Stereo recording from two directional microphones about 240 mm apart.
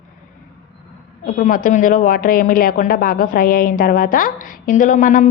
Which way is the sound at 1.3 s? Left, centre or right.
Left.